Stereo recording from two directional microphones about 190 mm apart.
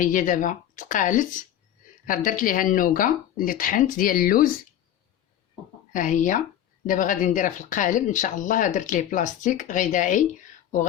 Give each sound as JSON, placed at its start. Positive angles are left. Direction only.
{"t": 0.0, "sound": "speech", "side_deg": 45}
{"t": 5.9, "sound": "speech", "side_deg": 45}